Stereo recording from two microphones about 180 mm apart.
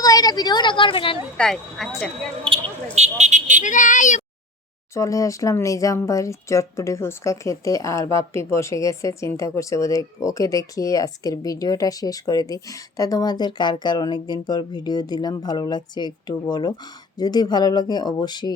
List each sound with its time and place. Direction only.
0.0 s a sound: 20° left (ahead or behind)
1.4 s speech: 5° left (ahead or behind)
2.9 s vehicle: 40° right (ahead or behind)
3.6 s speech: 45° left (ahead or behind)
4.9 s speech: 20° left (ahead or behind)